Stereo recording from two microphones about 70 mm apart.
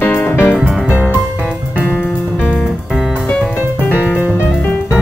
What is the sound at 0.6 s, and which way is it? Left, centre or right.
Music, centre.